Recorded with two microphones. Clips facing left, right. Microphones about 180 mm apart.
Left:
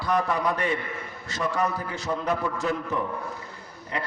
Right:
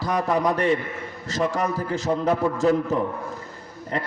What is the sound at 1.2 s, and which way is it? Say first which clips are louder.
A man's voice: right 3 dB; 40° right (ahead or behind).